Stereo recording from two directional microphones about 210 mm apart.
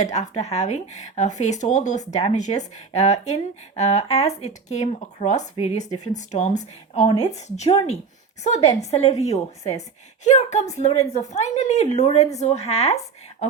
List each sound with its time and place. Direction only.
0.0 s speech: 30° left (ahead or behind)